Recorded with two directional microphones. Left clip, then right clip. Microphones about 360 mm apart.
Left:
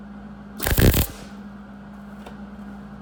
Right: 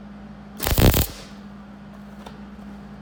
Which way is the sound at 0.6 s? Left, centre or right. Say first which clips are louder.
Right 1 dB; centre.